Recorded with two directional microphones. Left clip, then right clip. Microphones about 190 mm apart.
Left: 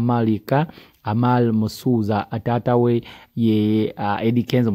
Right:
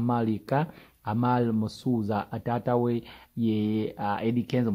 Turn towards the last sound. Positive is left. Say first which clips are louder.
# left 8 dB
turn(degrees=35)  # may be behind; listen again after turning